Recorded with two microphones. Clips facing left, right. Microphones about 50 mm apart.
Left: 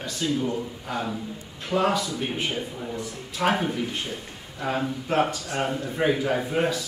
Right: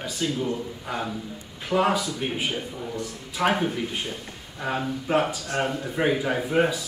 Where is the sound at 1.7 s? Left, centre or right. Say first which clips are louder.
Right 1 dB; centre.